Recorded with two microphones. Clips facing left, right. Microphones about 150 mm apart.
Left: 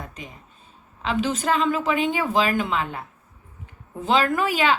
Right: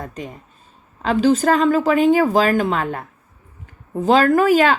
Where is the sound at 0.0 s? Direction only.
45° right (ahead or behind).